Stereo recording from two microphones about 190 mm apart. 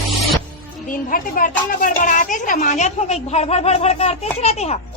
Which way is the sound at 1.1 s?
45° left (ahead or behind).